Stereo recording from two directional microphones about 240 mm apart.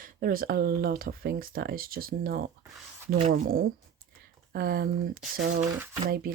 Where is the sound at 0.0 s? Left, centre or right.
Right.